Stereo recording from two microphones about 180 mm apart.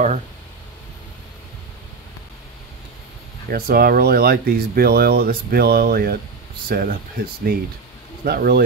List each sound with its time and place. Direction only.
3.4 s speech: 60° right (ahead or behind)